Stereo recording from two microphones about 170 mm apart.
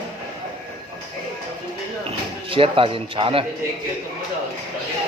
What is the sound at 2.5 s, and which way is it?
Speech, 30° right (ahead or behind).